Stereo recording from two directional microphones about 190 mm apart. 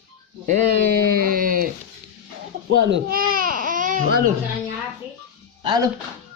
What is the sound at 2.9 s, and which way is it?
Baby cry, 50° right (ahead or behind).